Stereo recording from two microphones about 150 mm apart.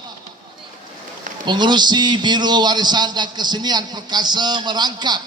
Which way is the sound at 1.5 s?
30° right (ahead or behind).